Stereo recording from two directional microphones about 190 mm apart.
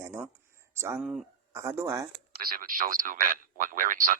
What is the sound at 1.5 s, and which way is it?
Speech, 15° right (ahead or behind).